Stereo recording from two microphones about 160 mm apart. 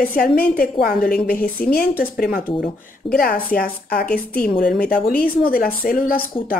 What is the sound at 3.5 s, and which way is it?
A woman's voice, 65° left (ahead or behind).